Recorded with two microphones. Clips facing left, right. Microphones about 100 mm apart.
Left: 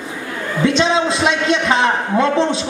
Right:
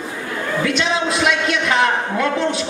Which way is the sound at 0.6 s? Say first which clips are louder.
Left 6 dB; 30° left (ahead or behind).